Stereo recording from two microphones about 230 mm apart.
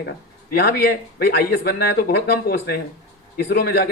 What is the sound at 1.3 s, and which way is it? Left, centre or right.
Speech, left.